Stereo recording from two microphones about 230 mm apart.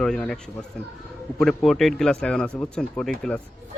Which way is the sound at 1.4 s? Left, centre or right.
Centre.